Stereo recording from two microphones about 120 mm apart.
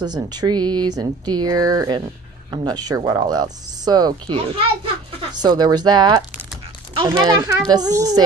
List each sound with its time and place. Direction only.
0.0 s speech: 35° right (ahead or behind)
4.4 s a child's voice: 50° right (ahead or behind)
5.3 s speech: 35° right (ahead or behind)